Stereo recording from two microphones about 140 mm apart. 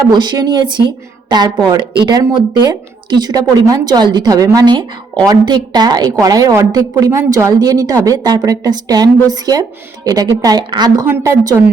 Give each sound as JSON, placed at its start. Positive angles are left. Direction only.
{"t": 0.1, "sound": "a woman's voice", "side_deg": -30}
{"t": 11.0, "sound": "a woman's voice", "side_deg": -20}